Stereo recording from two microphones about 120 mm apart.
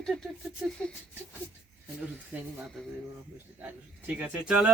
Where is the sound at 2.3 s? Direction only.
15° right (ahead or behind).